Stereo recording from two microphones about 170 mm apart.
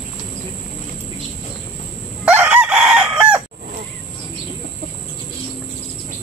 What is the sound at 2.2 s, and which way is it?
Chicken, 10° right (ahead or behind).